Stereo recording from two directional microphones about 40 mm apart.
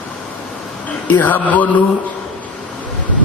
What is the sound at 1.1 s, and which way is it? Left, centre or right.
Speech, left.